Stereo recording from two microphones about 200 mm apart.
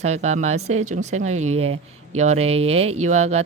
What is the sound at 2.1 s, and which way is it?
Speech, 35° right (ahead or behind).